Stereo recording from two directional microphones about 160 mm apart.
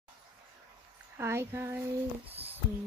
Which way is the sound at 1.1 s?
15° right (ahead or behind).